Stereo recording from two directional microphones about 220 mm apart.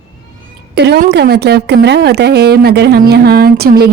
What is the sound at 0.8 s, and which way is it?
Speech, 50° right (ahead or behind).